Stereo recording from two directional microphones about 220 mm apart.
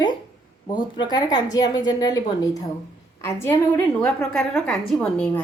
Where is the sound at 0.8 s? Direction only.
20° left (ahead or behind).